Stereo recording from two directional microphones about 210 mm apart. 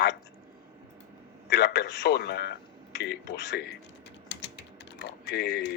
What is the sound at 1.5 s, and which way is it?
A man's voice, 55° left (ahead or behind).